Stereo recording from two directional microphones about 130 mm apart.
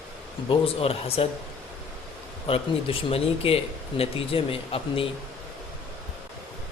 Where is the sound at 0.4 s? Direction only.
45° left (ahead or behind).